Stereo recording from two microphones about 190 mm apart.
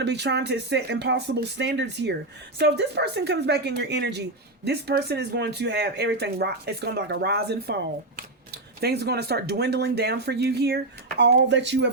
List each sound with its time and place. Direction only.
0.0 s speech: 65° right (ahead or behind)
8.8 s speech: 60° right (ahead or behind)